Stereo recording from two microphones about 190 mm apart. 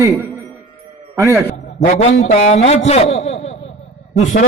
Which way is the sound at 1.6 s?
35° left (ahead or behind).